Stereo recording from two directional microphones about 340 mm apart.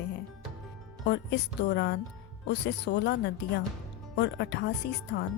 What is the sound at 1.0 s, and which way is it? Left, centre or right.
Speech, left.